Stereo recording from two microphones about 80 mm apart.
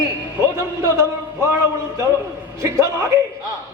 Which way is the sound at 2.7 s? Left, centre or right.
Right.